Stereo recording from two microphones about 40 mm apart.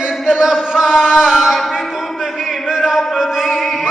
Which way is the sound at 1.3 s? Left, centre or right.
Centre.